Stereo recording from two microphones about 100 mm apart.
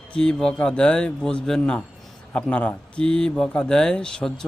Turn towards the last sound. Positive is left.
turn(degrees=5)  # may be behind; listen again after turning